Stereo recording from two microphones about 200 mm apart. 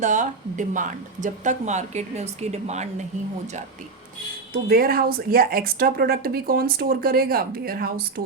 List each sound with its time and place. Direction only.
0.0 s speech: 40° right (ahead or behind)
4.5 s speech: 45° right (ahead or behind)